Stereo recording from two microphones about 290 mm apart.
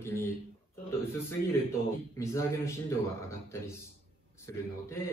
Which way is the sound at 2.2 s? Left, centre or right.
Centre.